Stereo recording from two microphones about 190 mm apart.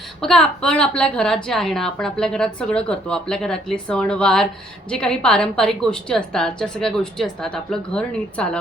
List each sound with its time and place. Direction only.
0.2 s a woman's voice: 5° left (ahead or behind)